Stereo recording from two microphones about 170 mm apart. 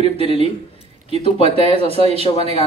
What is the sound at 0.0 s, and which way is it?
Speech, 35° left (ahead or behind).